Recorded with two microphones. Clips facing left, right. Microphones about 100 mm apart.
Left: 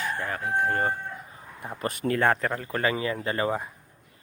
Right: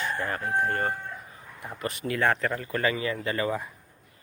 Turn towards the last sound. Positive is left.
turn(degrees=25)  # may be behind; listen again after turning